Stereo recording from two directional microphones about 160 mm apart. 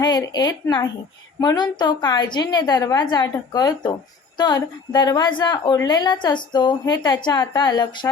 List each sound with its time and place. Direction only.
0.0 s a woman's voice: 25° left (ahead or behind)